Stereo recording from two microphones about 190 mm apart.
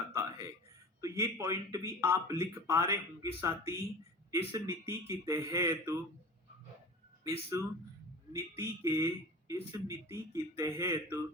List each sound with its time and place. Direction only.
0.1 s a sound: 15° right (ahead or behind)
1.0 s speech: 15° right (ahead or behind)
7.5 s speech: 15° right (ahead or behind)